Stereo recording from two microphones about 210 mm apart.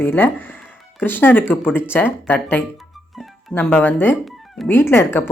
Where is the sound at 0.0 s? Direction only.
10° left (ahead or behind).